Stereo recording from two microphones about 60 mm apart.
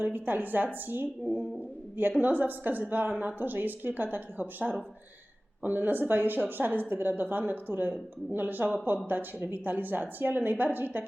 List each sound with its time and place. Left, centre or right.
0.0 s speech: right